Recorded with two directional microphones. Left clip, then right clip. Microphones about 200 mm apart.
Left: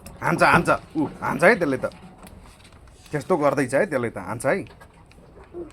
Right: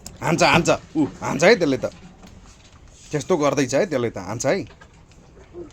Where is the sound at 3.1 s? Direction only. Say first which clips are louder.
Right 1 dB; 20° right (ahead or behind).